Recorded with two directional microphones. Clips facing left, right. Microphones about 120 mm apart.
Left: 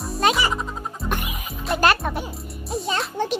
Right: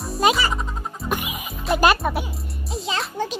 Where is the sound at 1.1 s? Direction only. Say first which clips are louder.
Right 1 dB; 15° right (ahead or behind).